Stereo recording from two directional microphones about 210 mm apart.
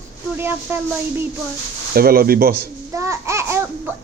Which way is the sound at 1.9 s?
45° right (ahead or behind).